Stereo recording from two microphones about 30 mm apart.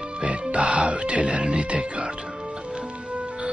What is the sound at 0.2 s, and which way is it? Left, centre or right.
Music, right.